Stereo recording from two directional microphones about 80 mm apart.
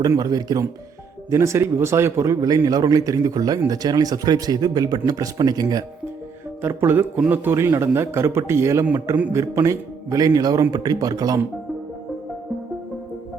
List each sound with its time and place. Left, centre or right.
0.2 s speech: right
1.3 s a man's voice: right
6.6 s a man's voice: right